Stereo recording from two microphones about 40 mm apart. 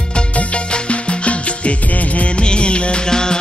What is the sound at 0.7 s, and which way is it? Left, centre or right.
Music, left.